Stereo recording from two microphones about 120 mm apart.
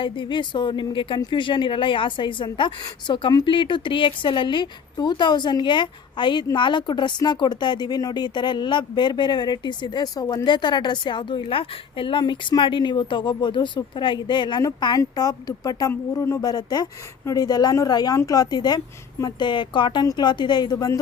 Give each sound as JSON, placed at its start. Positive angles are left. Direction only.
{"t": 0.0, "sound": "a woman's voice", "side_deg": 45}
{"t": 15.9, "sound": "a woman's voice", "side_deg": 25}